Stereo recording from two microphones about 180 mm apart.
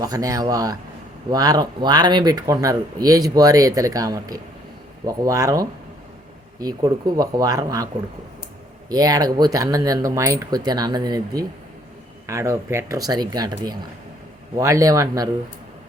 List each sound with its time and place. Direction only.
0.0 s speech: 20° right (ahead or behind)
8.9 s speech: 20° right (ahead or behind)